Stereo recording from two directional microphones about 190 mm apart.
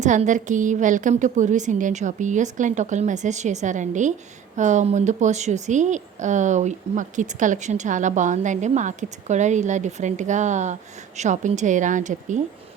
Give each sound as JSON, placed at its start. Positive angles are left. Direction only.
{"t": 0.0, "sound": "a woman's voice", "side_deg": -40}